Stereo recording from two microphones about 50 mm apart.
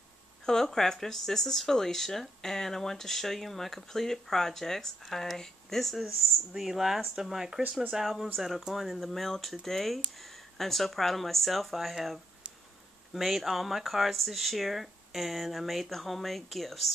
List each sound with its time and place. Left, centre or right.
0.5 s speech: centre
6.0 s speech: centre
12.4 s a sound: centre
13.1 s speech: centre